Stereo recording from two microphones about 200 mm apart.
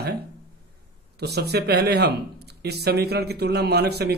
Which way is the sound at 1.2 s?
55° right (ahead or behind).